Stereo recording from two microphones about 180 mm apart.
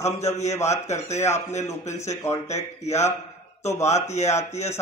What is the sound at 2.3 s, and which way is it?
Speech, 15° left (ahead or behind).